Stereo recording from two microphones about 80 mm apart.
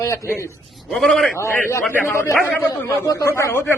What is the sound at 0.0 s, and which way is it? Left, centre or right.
Speech, left.